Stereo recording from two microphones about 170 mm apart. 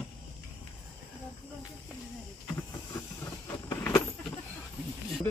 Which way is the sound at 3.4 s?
20° left (ahead or behind).